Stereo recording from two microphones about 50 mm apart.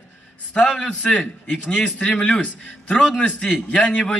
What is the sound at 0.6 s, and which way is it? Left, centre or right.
A man's voice, centre.